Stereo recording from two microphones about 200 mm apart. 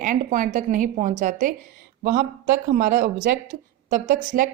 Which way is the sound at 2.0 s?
50° right (ahead or behind).